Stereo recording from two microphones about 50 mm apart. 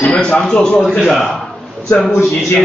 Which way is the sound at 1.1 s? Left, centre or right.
Centre.